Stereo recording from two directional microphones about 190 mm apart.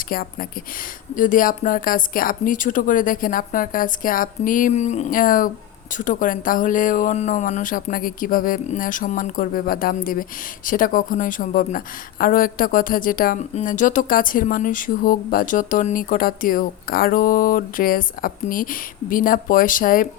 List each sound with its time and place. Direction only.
0.1 s speech: 50° left (ahead or behind)